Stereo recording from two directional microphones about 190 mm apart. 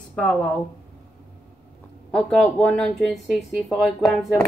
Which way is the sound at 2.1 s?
5° left (ahead or behind).